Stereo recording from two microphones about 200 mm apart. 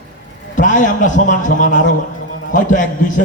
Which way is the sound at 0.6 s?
40° left (ahead or behind).